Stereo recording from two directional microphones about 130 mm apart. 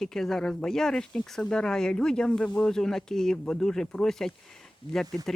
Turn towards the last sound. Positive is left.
turn(degrees=5)  # may be behind; listen again after turning